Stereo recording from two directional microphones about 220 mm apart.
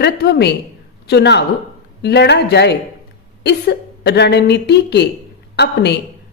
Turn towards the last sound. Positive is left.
turn(degrees=50)  # may be behind; listen again after turning